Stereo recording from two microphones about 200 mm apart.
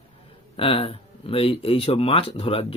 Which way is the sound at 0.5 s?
25° left (ahead or behind).